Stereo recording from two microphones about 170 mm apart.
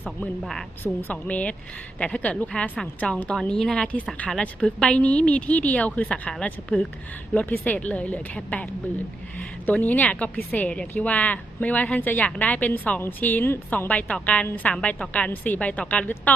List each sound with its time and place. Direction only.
0.2 s a woman's voice: 5° left (ahead or behind)